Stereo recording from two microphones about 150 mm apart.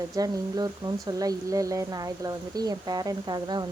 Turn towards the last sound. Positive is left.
turn(degrees=-25)  # may be behind; listen again after turning